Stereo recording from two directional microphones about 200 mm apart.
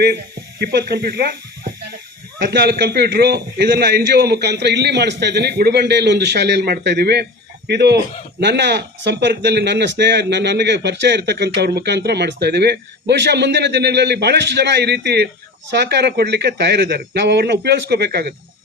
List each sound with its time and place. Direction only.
0.6 s speech: 55° right (ahead or behind)
2.4 s speech: 55° right (ahead or behind)